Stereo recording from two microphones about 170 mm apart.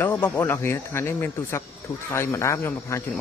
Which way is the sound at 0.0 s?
10° left (ahead or behind).